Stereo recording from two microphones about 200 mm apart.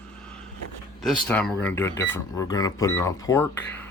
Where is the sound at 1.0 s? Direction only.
5° left (ahead or behind).